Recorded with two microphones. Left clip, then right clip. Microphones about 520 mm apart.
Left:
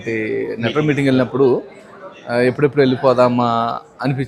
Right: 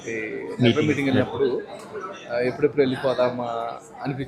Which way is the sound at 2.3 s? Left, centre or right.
Left.